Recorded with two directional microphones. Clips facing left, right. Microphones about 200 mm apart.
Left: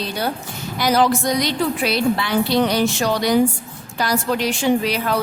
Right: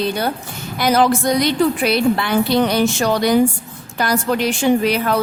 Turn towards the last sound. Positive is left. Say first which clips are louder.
# right 3 dB
turn(degrees=-55)  # may be behind; listen again after turning